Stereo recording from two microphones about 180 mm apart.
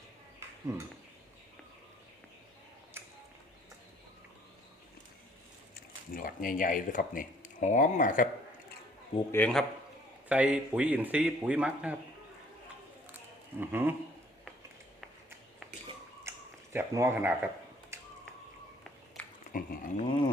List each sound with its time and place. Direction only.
0.7 s speech: 15° right (ahead or behind)
5.7 s speech: 55° left (ahead or behind)
9.3 s speech: 5° left (ahead or behind)
10.2 s speech: 5° right (ahead or behind)
13.6 s speech: 10° right (ahead or behind)
16.7 s speech: 15° right (ahead or behind)
17.9 s a sound: 15° right (ahead or behind)
19.2 s pig: 5° left (ahead or behind)
19.5 s livestock: 45° left (ahead or behind)